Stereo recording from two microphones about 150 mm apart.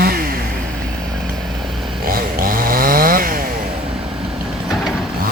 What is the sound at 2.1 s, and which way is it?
Chainsaw, 75° right (ahead or behind).